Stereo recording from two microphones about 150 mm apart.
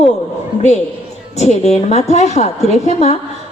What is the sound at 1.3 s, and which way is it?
A woman's voice, 50° left (ahead or behind).